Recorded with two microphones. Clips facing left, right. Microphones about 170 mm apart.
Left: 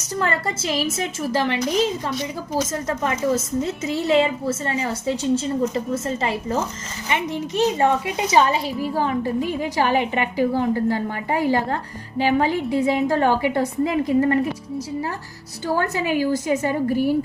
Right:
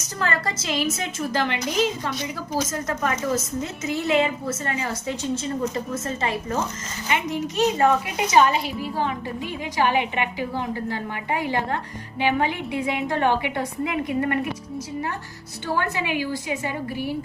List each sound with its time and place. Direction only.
0.2 s a woman's voice: 25° left (ahead or behind)
15.6 s a woman's voice: 40° left (ahead or behind)